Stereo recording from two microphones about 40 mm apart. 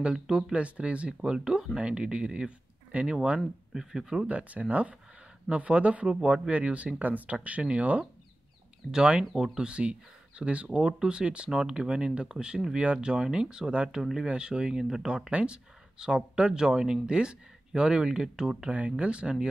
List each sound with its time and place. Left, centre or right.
0.0 s speech: centre
0.5 s speech: right
2.9 s speech: right
3.7 s speech: centre
4.3 s speech: right
7.0 s speech: right
8.9 s speech: right
18.7 s speech: right